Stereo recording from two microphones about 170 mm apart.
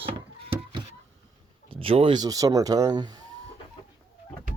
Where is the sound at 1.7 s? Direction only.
30° right (ahead or behind).